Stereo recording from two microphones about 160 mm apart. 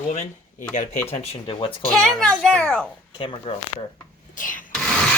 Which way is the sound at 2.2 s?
5° left (ahead or behind).